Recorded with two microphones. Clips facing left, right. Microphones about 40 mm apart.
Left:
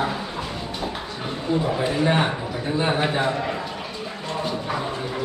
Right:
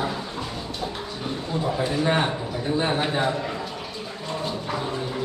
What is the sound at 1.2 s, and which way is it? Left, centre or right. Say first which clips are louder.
A man's voice: left 4 dB; centre.